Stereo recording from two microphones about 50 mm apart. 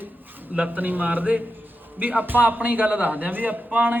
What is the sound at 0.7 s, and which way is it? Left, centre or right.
A man's voice, right.